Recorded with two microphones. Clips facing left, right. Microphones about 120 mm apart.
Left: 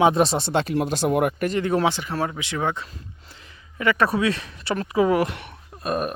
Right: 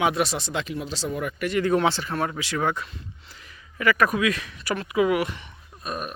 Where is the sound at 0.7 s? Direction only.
55° left (ahead or behind).